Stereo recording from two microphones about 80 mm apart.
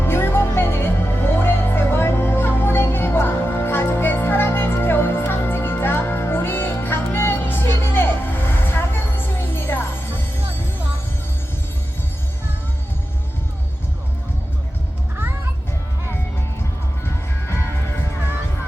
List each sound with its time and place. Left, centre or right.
0.0 s music: left
17.4 s music: left